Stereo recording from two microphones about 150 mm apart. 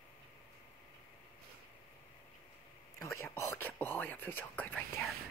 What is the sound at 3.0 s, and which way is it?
Whispering, 20° left (ahead or behind).